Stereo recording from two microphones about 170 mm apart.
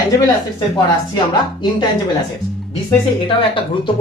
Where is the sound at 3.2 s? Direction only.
30° left (ahead or behind).